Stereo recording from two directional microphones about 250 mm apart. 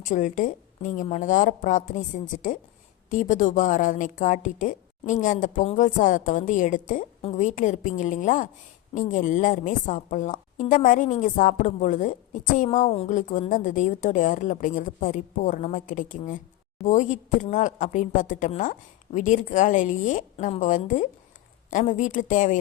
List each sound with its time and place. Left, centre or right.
0.0 s a woman's voice: left